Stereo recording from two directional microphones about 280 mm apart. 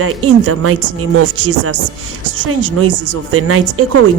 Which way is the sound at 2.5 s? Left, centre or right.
Right.